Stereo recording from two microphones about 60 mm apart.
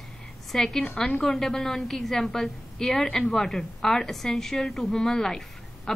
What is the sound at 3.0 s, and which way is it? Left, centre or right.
Speech, centre.